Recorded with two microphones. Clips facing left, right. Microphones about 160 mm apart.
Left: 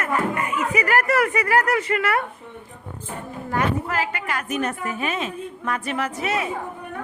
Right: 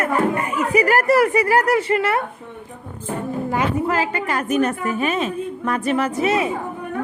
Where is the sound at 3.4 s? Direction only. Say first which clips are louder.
Right 2 dB; 20° right (ahead or behind).